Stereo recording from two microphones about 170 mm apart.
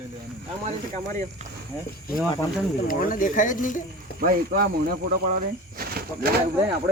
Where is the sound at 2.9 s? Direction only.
55° left (ahead or behind).